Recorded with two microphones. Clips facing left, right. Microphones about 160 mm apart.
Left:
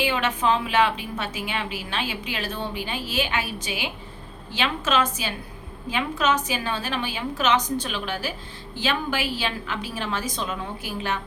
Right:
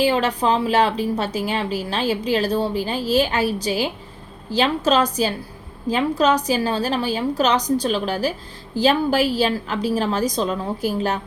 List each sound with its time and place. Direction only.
0.0 s a woman's voice: 35° right (ahead or behind)